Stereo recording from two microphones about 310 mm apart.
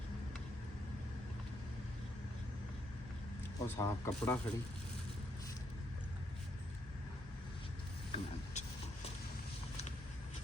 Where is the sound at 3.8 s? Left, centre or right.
Centre.